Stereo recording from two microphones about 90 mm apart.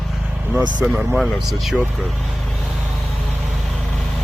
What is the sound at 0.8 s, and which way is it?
Speech, 5° right (ahead or behind).